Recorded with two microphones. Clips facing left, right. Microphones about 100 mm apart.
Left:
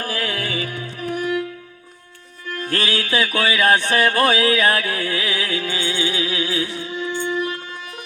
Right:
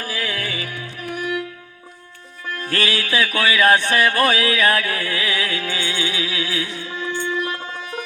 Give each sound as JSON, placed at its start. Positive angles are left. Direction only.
{"t": 0.0, "sound": "music", "side_deg": 45}
{"t": 0.3, "sound": "music", "side_deg": 30}
{"t": 2.6, "sound": "music", "side_deg": 30}